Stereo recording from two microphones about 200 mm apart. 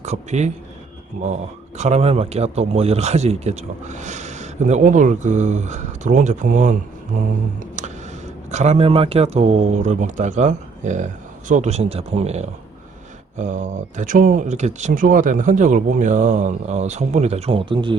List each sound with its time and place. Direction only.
0.0 s speech: 35° right (ahead or behind)
1.8 s speech: 35° right (ahead or behind)
8.4 s speech: 35° right (ahead or behind)